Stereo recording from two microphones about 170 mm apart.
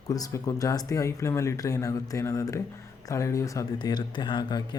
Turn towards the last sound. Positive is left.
turn(degrees=25)  # may be behind; listen again after turning